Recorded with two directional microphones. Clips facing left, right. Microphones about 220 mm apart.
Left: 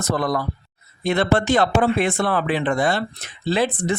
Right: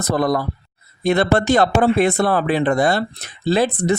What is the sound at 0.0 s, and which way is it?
Speech, 40° right (ahead or behind).